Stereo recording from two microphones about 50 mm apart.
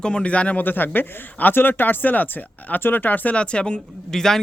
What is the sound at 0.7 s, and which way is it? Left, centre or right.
Speech, left.